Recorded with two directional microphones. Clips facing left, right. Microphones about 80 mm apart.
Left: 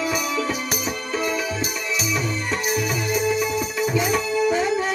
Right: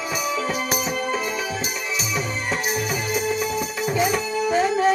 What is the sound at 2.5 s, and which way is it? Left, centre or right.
Music, right.